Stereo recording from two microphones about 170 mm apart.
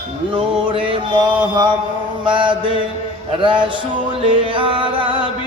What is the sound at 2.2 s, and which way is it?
Music, 30° right (ahead or behind).